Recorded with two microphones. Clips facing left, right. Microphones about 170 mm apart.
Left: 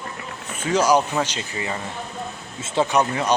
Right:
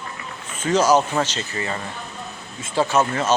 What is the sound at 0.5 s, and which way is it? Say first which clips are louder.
Speech: right 1 dB; 10° left (ahead or behind).